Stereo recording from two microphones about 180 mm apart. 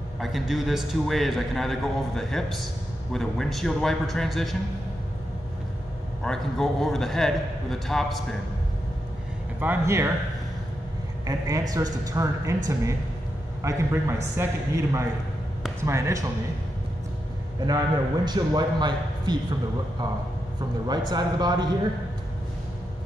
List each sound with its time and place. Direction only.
0.2 s a man's voice: centre (ahead or behind)
6.2 s a man's voice: 5° left (ahead or behind)
9.6 s a man's voice: 15° right (ahead or behind)
11.2 s a man's voice: 20° right (ahead or behind)
17.6 s a man's voice: 25° right (ahead or behind)
21.1 s a man's voice: 20° right (ahead or behind)